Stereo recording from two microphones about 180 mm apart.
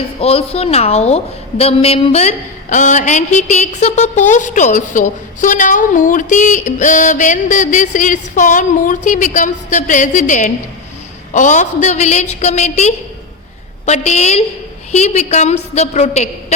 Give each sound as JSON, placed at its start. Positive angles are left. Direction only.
{"t": 0.2, "sound": "a woman's voice", "side_deg": 35}